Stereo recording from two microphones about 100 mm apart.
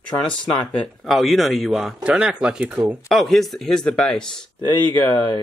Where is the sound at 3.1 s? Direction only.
Centre (ahead or behind).